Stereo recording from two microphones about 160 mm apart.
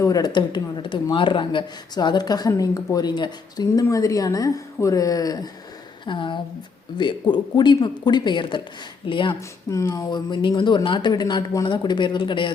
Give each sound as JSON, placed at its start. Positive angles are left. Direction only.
{"t": 0.0, "sound": "a woman's voice", "side_deg": 25}
{"t": 9.6, "sound": "speech", "side_deg": 20}